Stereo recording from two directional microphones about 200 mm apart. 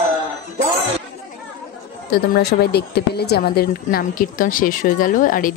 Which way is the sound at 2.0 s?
50° left (ahead or behind).